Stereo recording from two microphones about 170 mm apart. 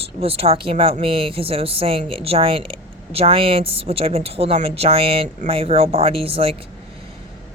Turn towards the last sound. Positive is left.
turn(degrees=-35)  # may be behind; listen again after turning